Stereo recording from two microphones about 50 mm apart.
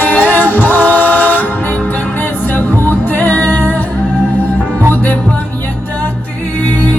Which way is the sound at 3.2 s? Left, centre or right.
Left.